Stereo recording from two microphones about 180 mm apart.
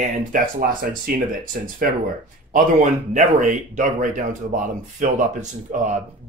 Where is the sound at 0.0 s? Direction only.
50° right (ahead or behind).